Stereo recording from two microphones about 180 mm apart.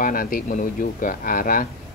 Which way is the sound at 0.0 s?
50° left (ahead or behind).